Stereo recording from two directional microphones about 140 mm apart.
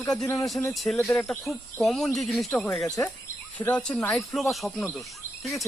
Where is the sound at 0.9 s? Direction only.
15° left (ahead or behind).